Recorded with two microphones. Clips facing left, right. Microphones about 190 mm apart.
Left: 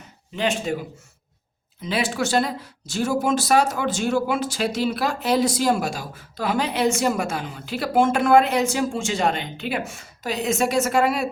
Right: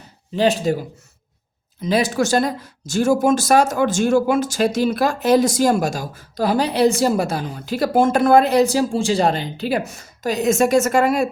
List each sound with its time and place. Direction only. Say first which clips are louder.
0.3 s speech: right 6 dB; 35° right (ahead or behind)
1.8 s speech: right 6 dB; 40° right (ahead or behind)